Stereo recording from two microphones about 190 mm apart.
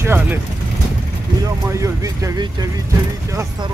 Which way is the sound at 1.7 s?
15° right (ahead or behind).